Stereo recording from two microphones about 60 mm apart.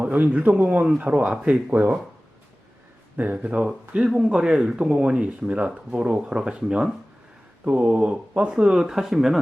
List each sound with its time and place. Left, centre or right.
0.0 s a man's voice: right
3.2 s speech: right; by 9.4 s centre